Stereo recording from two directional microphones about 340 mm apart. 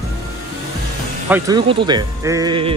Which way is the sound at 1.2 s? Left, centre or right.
Centre.